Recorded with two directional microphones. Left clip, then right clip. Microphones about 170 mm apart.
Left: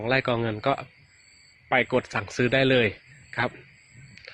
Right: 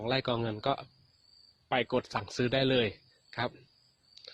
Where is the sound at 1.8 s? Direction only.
5° right (ahead or behind).